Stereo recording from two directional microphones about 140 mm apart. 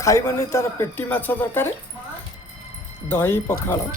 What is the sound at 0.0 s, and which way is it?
A man's voice, 20° left (ahead or behind).